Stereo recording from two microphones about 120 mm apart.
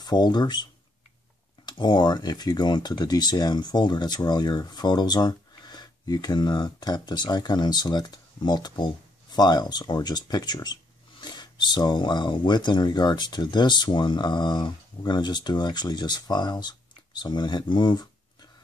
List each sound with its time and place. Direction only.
0.0 s speech: 35° left (ahead or behind)
1.7 s speech: 40° left (ahead or behind)